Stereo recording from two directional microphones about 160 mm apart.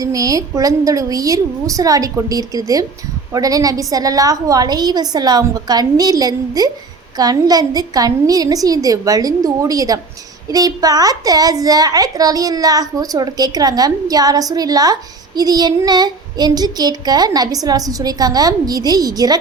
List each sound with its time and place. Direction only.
0.0 s a child's voice: 20° right (ahead or behind)